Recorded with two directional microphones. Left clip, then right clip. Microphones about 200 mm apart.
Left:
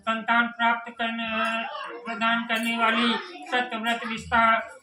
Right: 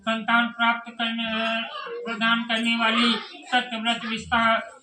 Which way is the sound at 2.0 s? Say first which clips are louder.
Right 2 dB; 25° left (ahead or behind).